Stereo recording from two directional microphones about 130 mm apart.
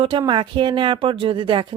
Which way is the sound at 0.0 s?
40° right (ahead or behind).